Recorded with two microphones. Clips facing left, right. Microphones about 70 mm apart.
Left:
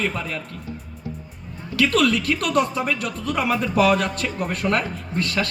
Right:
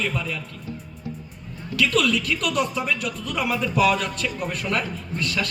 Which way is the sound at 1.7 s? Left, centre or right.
Left.